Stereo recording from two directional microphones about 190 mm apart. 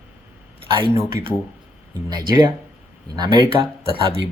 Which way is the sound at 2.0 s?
20° right (ahead or behind).